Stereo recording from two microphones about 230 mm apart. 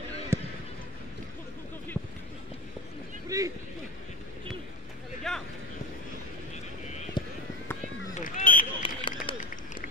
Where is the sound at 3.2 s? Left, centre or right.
Centre.